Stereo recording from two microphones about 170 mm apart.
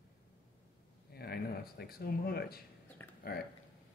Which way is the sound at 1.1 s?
65° left (ahead or behind).